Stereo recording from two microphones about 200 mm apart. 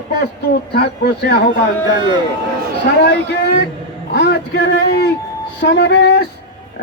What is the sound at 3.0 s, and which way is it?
A man's voice, 55° left (ahead or behind).